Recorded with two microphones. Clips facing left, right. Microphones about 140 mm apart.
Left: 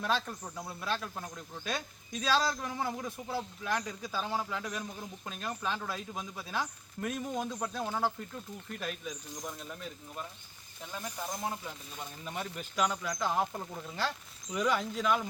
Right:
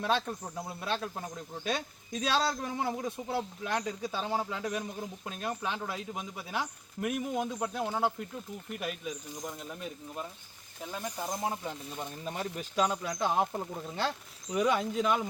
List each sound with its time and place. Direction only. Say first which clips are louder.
0.0 s speech: right 2 dB; 20° right (ahead or behind)
2.3 s speech: left 1 dB; 25° right (ahead or behind)
9.0 s speech: right 2 dB; 5° right (ahead or behind); by 11.5 s 25° right (ahead or behind)
11.9 s speech: even; 35° right (ahead or behind)